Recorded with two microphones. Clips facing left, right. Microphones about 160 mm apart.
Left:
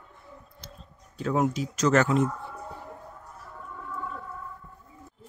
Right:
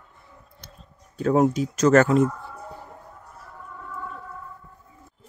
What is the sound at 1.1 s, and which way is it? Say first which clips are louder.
Speech: right 6 dB; 45° right (ahead or behind).